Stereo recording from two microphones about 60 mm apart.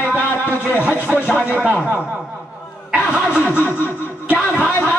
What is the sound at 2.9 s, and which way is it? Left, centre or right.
Vehicle, right.